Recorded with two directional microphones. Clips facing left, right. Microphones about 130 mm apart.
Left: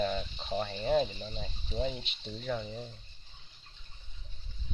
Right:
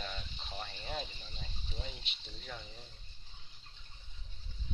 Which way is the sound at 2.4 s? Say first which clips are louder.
Left 13 dB; 80° left.